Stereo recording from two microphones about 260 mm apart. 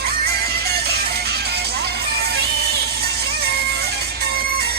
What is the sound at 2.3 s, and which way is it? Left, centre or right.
Music, right.